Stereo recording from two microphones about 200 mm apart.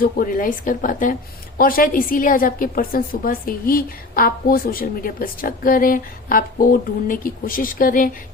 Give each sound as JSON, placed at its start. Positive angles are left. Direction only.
{"t": 0.0, "sound": "a woman's voice", "side_deg": 45}